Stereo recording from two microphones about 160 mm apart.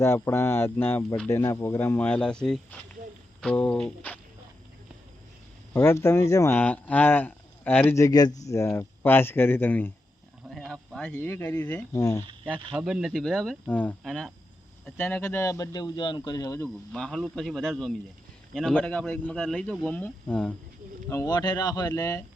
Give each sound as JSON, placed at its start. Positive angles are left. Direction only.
{"t": 0.0, "sound": "speech", "side_deg": 15}
{"t": 5.7, "sound": "speech", "side_deg": 15}
{"t": 12.7, "sound": "speech", "side_deg": -5}
{"t": 14.8, "sound": "speech", "side_deg": 10}
{"t": 16.9, "sound": "speech", "side_deg": 5}
{"t": 21.1, "sound": "speech", "side_deg": 20}